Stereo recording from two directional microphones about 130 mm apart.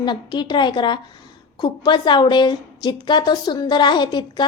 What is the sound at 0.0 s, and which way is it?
A woman's voice, 35° left (ahead or behind).